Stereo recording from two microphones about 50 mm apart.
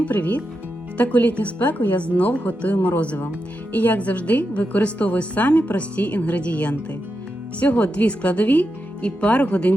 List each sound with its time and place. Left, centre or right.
0.0 s a woman's voice: left
2.0 s a woman's voice: left